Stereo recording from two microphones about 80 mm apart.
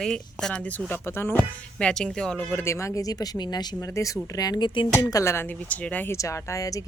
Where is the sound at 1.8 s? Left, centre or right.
Centre.